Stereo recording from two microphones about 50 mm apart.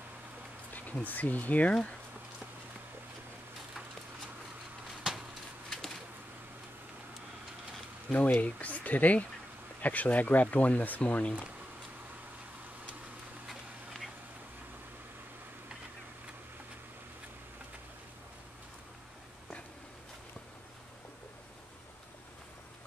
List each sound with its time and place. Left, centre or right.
1.0 s speech: left
8.1 s speech: left
13.5 s a sound: centre